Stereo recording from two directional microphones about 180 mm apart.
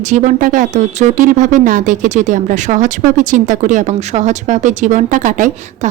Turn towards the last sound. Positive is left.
turn(degrees=-45)  # may be behind; listen again after turning